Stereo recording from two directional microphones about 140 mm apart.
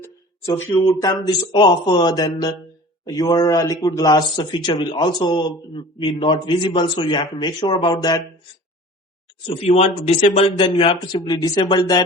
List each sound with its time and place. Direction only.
0.9 s speech: 25° left (ahead or behind)
9.5 s speech: 45° left (ahead or behind)